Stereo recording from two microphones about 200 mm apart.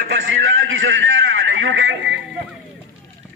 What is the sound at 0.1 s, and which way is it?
A man's voice, 70° right (ahead or behind).